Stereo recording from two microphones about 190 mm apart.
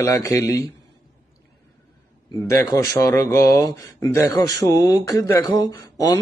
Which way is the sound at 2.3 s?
20° left (ahead or behind).